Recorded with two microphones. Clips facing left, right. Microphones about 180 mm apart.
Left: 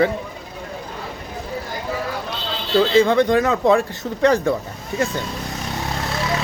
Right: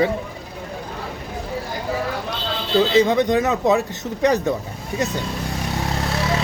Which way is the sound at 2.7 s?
20° right (ahead or behind).